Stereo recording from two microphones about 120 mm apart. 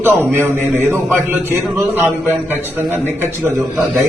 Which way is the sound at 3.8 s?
Centre (ahead or behind).